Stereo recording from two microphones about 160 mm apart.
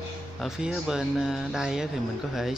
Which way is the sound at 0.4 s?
Centre (ahead or behind).